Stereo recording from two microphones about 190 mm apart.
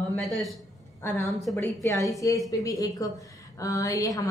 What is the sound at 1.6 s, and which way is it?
A woman's voice, 15° left (ahead or behind).